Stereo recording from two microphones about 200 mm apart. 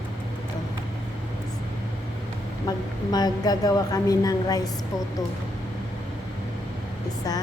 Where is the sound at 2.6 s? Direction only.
20° left (ahead or behind).